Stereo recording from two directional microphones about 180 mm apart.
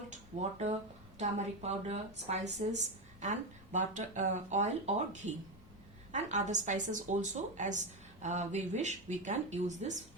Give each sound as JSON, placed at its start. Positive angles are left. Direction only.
{"t": 0.1, "sound": "speech", "side_deg": -40}